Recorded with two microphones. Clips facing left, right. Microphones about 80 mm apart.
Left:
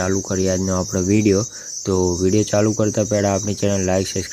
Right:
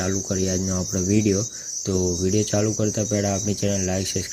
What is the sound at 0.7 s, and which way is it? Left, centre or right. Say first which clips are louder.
Cricket: left 5 dB; left.